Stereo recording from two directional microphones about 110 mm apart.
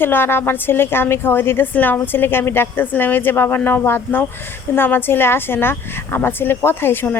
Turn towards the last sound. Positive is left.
turn(degrees=20)  # may be behind; listen again after turning